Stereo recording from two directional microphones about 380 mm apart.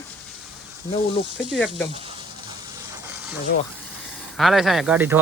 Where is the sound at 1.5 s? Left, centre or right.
Centre.